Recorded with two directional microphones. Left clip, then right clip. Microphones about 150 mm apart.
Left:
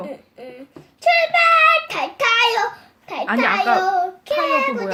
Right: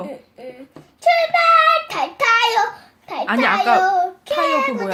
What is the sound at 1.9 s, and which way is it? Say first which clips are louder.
Child singing: right 2 dB; 15° left (ahead or behind).